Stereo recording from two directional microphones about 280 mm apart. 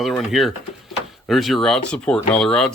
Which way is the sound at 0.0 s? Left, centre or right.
Centre.